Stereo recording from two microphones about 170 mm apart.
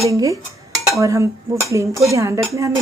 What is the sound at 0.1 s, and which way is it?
Dishes, 20° right (ahead or behind).